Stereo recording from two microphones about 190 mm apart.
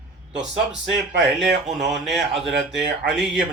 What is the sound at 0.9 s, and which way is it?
Speech, 65° right (ahead or behind).